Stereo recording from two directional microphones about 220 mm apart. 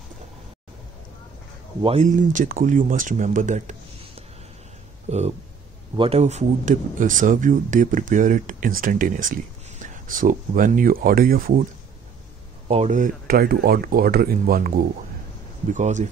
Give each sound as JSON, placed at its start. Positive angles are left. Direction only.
{"t": 1.8, "sound": "speech", "side_deg": -30}
{"t": 12.6, "sound": "speech", "side_deg": -30}
{"t": 15.7, "sound": "speech", "side_deg": -35}